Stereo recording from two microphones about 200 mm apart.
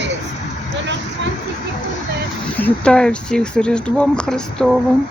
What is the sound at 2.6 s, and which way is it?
Speech, 5° left (ahead or behind).